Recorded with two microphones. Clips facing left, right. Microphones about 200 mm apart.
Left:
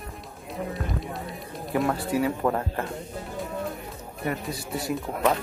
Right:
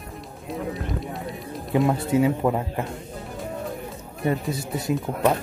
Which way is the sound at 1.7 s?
20° right (ahead or behind).